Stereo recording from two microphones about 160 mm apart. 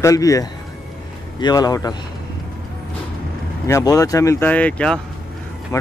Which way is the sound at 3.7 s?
20° left (ahead or behind).